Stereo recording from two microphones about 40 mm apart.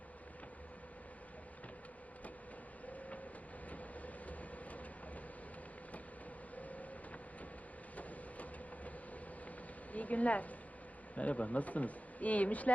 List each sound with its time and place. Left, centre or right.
3.7 s train: left
6.6 s vehicle: left
7.9 s a sound: left
9.9 s speech: left